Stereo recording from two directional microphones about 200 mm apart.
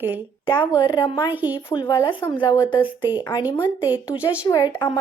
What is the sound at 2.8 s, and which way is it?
Speech, 10° right (ahead or behind).